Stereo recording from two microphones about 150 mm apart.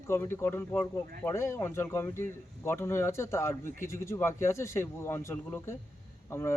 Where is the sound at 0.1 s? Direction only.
15° left (ahead or behind).